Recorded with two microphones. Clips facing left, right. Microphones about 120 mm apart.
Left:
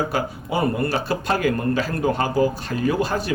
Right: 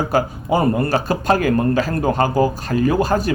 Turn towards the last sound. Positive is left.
turn(degrees=-45)  # may be behind; listen again after turning